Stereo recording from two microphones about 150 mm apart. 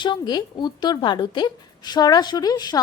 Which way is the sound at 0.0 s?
30° left (ahead or behind).